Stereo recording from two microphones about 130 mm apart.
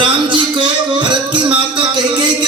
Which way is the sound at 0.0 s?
40° right (ahead or behind).